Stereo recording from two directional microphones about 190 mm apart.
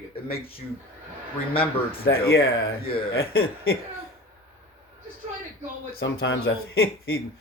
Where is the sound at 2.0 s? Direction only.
55° left (ahead or behind).